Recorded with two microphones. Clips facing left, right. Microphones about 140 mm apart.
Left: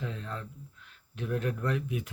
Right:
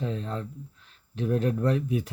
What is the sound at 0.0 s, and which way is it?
Speech, 30° right (ahead or behind).